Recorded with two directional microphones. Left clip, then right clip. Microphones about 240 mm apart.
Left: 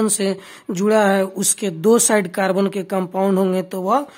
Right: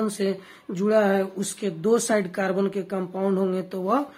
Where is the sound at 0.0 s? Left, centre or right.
Left.